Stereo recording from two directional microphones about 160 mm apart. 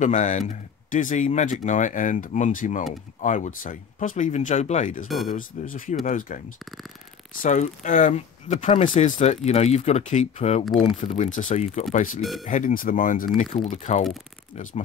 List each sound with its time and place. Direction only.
0.0 s speech: 50° left (ahead or behind)
5.0 s speech: centre (ahead or behind)
5.3 s speech: 55° left (ahead or behind)
7.4 s speech: 50° left (ahead or behind)
12.2 s speech: centre (ahead or behind)
12.4 s speech: 55° left (ahead or behind)